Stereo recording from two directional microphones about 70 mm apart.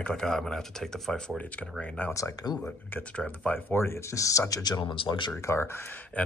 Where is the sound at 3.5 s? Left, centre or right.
Left.